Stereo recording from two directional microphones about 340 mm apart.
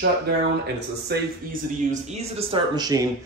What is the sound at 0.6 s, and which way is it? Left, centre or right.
Speech, right.